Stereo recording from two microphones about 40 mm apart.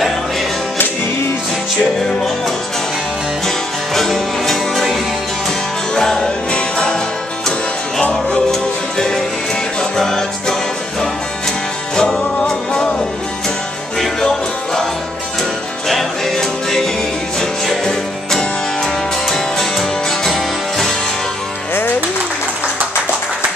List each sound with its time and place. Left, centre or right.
3.4 s music: centre
5.9 s music: centre
8.0 s music: left
8.9 s music: centre
11.9 s music: centre
14.2 s music: centre
15.9 s music: centre